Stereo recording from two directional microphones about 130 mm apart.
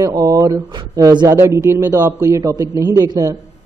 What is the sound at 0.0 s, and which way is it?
Speech, 25° right (ahead or behind).